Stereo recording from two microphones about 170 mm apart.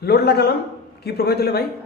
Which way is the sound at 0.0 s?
70° left (ahead or behind).